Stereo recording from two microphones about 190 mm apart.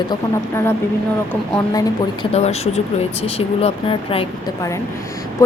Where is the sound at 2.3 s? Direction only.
35° left (ahead or behind).